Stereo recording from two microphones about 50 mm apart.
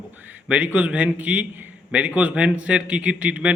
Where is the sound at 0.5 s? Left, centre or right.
Right.